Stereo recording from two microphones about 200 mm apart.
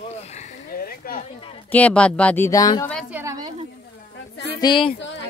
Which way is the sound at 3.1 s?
15° right (ahead or behind).